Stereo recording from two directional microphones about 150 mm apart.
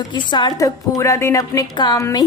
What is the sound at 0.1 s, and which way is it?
A woman's voice, 30° left (ahead or behind).